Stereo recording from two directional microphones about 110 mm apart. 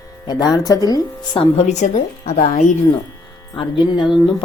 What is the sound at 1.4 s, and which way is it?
Speech, 80° left.